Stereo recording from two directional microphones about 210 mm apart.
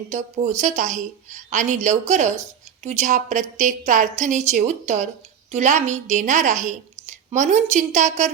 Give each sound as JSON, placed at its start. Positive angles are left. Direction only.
{"t": 0.1, "sound": "a woman's voice", "side_deg": -35}